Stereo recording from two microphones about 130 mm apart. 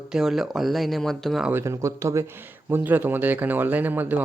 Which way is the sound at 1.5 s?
20° right (ahead or behind).